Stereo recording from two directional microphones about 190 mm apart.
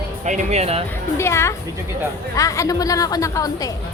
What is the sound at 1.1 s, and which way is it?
A woman's voice, 15° left (ahead or behind).